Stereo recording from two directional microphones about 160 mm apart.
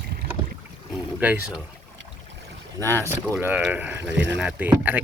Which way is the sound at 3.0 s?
15° right (ahead or behind).